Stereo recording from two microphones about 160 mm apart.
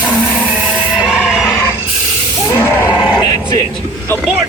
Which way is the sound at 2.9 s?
25° left (ahead or behind).